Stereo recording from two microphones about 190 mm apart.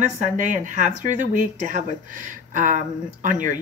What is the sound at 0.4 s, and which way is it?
A woman's voice, 40° right (ahead or behind).